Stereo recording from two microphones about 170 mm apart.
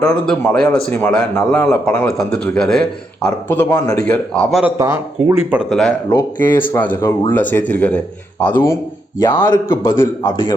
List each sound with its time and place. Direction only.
0.0 s a man's voice: 5° left (ahead or behind)
4.8 s speech: 15° right (ahead or behind)
5.7 s a man's voice: 5° left (ahead or behind); by 10.5 s 20° left (ahead or behind)